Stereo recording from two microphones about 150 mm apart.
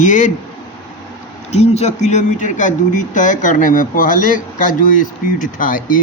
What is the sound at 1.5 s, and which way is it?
Speech, 45° left (ahead or behind).